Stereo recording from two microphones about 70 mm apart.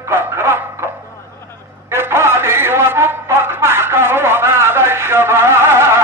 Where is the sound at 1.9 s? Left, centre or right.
Right.